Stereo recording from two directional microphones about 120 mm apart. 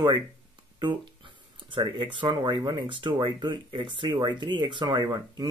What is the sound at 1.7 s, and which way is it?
Speech, 45° right (ahead or behind).